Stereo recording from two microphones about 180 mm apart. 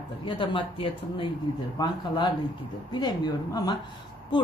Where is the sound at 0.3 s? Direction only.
25° left (ahead or behind).